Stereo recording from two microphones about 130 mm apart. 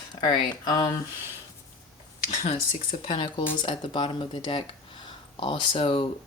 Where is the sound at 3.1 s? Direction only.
40° left (ahead or behind).